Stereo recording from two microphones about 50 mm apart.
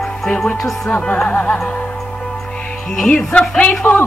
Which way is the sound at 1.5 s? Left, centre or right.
Centre.